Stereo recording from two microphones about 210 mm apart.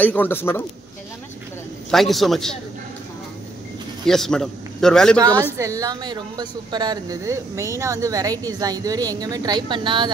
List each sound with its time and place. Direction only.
0.0 s a man's voice: 10° left (ahead or behind)
1.9 s a man's voice: centre (ahead or behind)
4.0 s a man's voice: centre (ahead or behind)
5.2 s a woman's voice: 15° right (ahead or behind)